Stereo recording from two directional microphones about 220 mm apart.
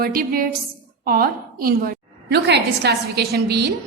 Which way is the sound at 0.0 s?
45° right (ahead or behind).